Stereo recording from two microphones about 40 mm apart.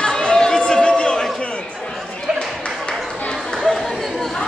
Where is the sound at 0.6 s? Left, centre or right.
Left.